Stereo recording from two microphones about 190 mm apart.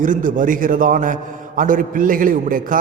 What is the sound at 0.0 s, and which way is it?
A man's voice, 45° right (ahead or behind).